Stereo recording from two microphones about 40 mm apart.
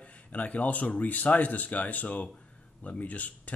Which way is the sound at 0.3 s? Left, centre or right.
Left.